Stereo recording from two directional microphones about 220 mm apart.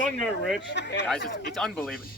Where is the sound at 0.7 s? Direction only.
50° left (ahead or behind).